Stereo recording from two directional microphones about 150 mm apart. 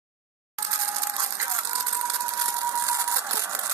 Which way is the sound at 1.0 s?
20° right (ahead or behind).